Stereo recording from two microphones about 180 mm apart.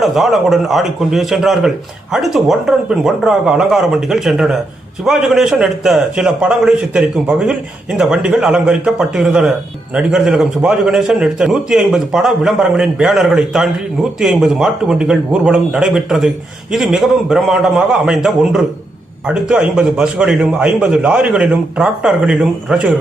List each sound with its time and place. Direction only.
0.0 s a man's voice: centre (ahead or behind)